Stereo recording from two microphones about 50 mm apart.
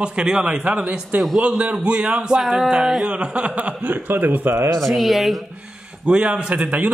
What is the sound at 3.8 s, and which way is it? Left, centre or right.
Speech, right.